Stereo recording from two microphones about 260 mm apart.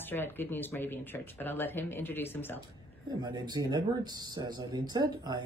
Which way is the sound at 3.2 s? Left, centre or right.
Centre.